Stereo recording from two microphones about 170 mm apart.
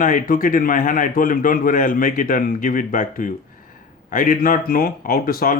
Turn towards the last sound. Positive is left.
turn(degrees=55)  # may be behind; listen again after turning